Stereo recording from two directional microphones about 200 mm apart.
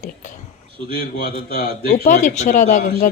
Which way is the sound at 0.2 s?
40° left (ahead or behind).